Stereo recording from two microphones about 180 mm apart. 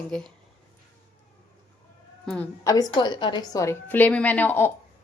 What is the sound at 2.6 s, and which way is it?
A woman's voice, 20° left (ahead or behind).